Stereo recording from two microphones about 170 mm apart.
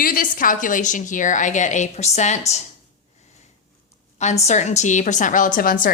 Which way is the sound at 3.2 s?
45° left (ahead or behind).